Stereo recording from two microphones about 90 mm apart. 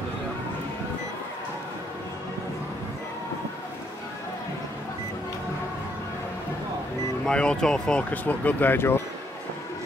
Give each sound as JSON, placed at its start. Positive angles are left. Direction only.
{"t": 7.2, "sound": "speech", "side_deg": 10}